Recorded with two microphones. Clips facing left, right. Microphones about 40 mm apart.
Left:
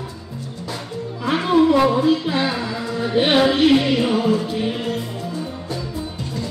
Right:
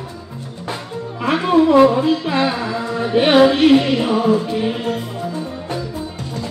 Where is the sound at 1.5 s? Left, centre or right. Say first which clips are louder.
Right 4 dB; right.